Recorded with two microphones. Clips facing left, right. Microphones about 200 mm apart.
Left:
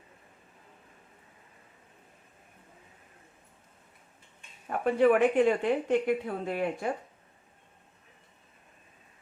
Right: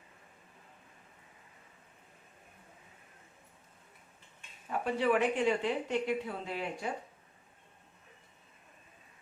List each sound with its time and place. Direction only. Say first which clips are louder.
4.7 s a woman's voice: left 6 dB; 55° left (ahead or behind)